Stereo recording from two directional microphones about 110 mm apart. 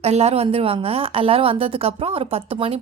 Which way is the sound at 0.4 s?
60° right (ahead or behind).